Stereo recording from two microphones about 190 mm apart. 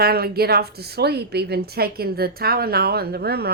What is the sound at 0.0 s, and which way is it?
A woman's voice, 55° right (ahead or behind).